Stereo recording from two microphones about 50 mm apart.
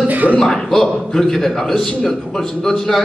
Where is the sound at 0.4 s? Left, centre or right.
Centre.